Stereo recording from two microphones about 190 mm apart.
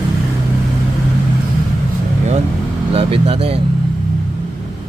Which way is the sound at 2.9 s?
30° right (ahead or behind).